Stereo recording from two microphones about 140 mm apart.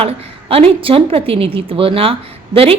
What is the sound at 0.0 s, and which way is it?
A woman's voice, 40° right (ahead or behind).